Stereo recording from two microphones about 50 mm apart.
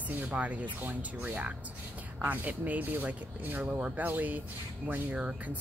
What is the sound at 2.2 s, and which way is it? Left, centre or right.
Speech, right.